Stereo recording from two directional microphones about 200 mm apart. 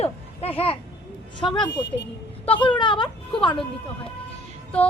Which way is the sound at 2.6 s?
25° left (ahead or behind).